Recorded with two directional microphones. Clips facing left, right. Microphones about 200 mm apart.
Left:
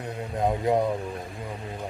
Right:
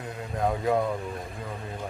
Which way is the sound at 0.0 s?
20° left (ahead or behind).